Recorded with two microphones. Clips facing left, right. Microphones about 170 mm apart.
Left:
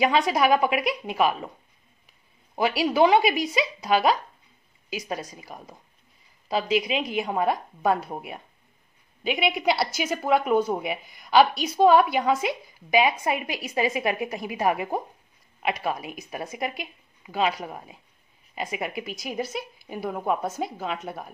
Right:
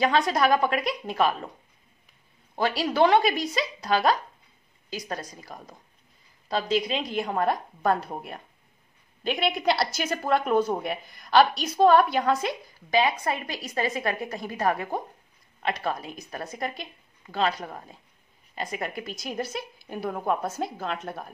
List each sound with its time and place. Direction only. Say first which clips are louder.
0.0 s a woman's voice: left 1 dB; 10° left (ahead or behind)
2.5 s a woman's voice: left 2 dB; 10° left (ahead or behind)